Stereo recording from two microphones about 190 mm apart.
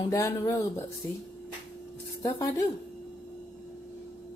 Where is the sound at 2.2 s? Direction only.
15° left (ahead or behind).